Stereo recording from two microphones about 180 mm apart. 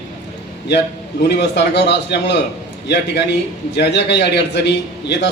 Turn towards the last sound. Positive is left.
turn(degrees=70)  # may be behind; listen again after turning